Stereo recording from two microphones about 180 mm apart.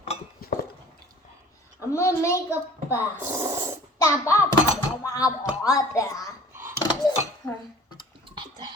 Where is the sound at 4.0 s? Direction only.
15° left (ahead or behind).